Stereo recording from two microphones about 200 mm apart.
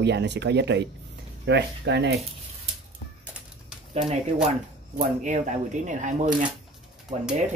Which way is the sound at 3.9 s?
30° right (ahead or behind).